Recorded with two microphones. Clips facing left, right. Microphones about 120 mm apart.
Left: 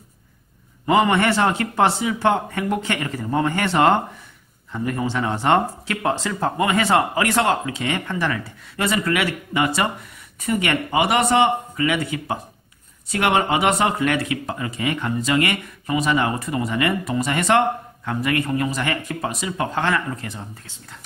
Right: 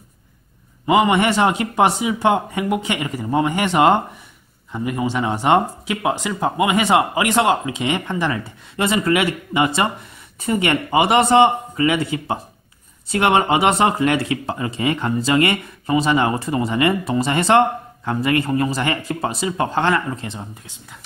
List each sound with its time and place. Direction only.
0.8 s speech: 10° right (ahead or behind)